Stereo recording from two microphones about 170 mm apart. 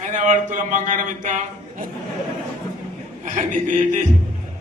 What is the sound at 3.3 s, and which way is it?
Speech, 45° right (ahead or behind).